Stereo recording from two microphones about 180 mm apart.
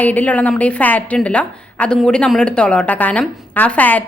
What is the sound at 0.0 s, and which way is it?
A woman's voice, 10° left (ahead or behind).